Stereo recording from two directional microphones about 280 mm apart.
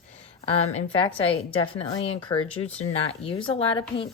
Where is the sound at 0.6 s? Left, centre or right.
Left.